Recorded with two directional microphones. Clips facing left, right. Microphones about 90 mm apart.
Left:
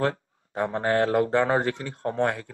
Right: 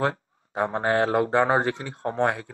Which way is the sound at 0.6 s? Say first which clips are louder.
Right 1 dB; 20° right (ahead or behind).